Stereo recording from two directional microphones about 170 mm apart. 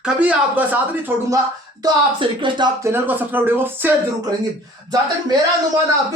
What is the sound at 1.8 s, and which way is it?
Speech, 25° right (ahead or behind).